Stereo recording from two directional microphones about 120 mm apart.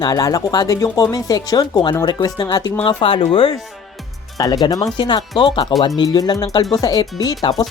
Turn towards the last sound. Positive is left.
turn(degrees=35)  # may be behind; listen again after turning